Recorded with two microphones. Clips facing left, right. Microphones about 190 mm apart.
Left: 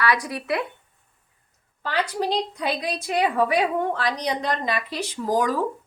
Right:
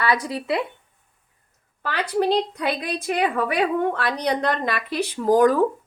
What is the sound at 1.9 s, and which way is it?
A woman's voice, 60° right (ahead or behind).